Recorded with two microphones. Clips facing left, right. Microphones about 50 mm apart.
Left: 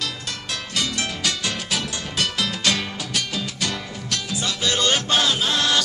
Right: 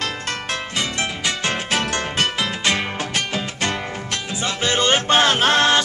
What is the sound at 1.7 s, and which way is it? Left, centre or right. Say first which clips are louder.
Music: right 6 dB; right.